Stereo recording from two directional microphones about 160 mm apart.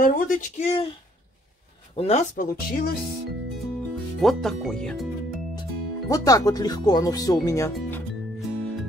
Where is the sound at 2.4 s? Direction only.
70° left (ahead or behind).